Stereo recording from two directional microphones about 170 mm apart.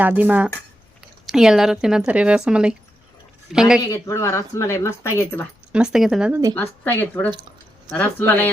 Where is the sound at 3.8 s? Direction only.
20° left (ahead or behind).